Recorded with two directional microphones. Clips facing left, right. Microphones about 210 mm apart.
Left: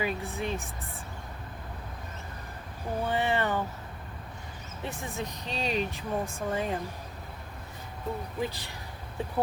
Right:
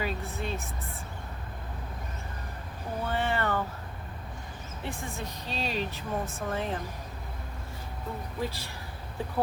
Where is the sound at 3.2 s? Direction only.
15° left (ahead or behind).